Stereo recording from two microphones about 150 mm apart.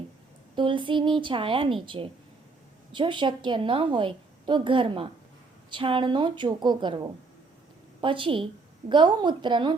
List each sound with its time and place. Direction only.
0.5 s a woman's voice: 35° right (ahead or behind)